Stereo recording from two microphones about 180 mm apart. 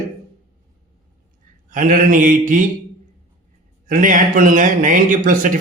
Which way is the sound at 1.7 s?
50° right (ahead or behind).